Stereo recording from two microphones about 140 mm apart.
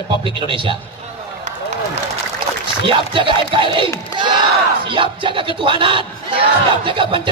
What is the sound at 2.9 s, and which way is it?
Speech, 35° right (ahead or behind).